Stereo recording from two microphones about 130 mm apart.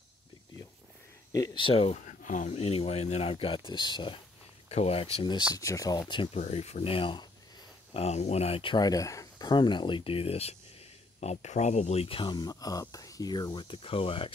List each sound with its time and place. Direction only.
1.3 s speech: 30° left (ahead or behind)
1.6 s speech: 45° left (ahead or behind)
2.0 s speech: 75° left (ahead or behind); by 4.2 s 35° left (ahead or behind)
4.6 s speech: 55° left (ahead or behind)
5.5 s speech: 25° left (ahead or behind)
6.3 s speech: 55° left (ahead or behind); by 7.2 s 40° left (ahead or behind)
7.9 s speech: 55° left (ahead or behind)